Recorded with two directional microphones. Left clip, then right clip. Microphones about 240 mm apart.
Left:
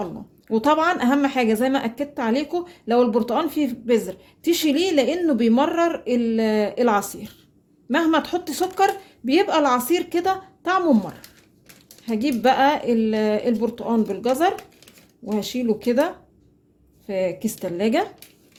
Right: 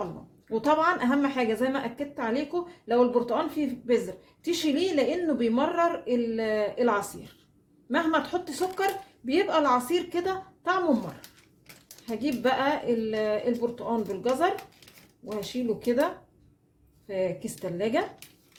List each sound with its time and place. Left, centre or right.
0.5 s a woman's voice: left
12.0 s a woman's voice: left
17.1 s a woman's voice: left